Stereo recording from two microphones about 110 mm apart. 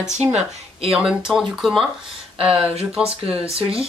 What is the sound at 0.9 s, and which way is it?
Speech, 5° right (ahead or behind).